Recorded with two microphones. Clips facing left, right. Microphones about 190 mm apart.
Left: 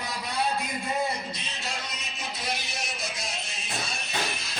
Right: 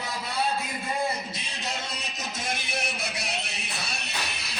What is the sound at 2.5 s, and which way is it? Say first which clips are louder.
Music: right 3 dB; 55° right (ahead or behind).